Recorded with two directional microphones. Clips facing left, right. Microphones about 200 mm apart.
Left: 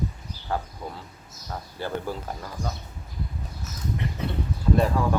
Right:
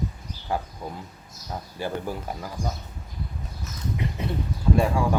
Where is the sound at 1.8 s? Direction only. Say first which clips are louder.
Even; 15° right (ahead or behind).